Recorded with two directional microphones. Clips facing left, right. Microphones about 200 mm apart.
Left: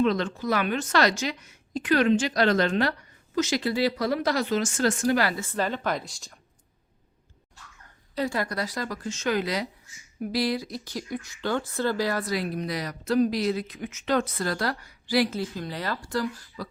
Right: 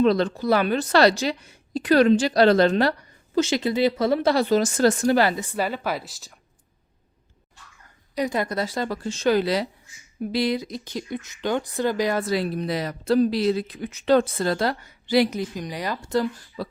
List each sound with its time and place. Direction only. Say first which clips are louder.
0.0 s speech: right 4 dB; 35° right (ahead or behind)
5.4 s speech: right 2 dB; 10° right (ahead or behind)
8.1 s speech: right 3 dB; 20° right (ahead or behind)